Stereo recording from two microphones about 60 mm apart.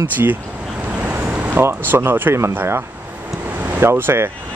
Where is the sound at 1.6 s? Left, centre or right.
Right.